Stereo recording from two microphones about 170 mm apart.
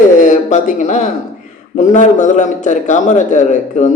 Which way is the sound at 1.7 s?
45° left (ahead or behind).